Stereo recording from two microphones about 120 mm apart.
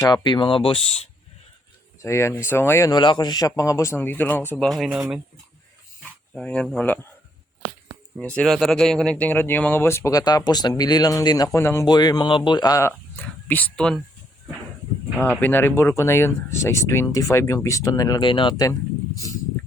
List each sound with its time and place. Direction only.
0.1 s speech: 40° left (ahead or behind)
2.0 s speech: 25° left (ahead or behind)
2.9 s speech: 40° left (ahead or behind); by 4.6 s 15° left (ahead or behind)
4.6 s speech: centre (ahead or behind)
6.3 s speech: 10° left (ahead or behind)
8.2 s speech: 10° left (ahead or behind)
11.9 s speech: 35° left (ahead or behind)
13.2 s speech: 10° left (ahead or behind)
15.2 s speech: 15° left (ahead or behind)